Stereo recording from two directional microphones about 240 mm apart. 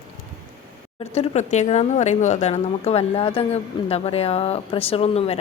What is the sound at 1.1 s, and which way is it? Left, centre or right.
A woman's voice, left.